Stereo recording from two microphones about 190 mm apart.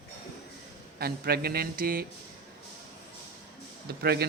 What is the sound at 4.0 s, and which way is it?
Speech, 55° right (ahead or behind).